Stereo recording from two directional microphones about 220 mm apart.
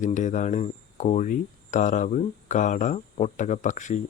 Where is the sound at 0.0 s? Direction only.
35° left (ahead or behind).